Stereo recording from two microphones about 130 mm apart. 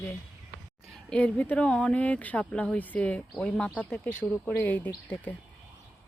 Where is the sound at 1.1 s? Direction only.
10° left (ahead or behind).